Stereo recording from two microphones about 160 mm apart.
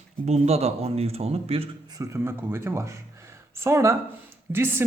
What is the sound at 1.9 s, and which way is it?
A man's voice, 20° right (ahead or behind).